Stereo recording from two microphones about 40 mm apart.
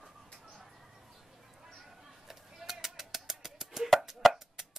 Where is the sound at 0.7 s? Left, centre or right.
Centre.